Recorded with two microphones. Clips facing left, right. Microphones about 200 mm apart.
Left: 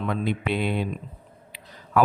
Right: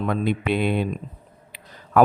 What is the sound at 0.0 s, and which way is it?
A man's voice, 50° right (ahead or behind).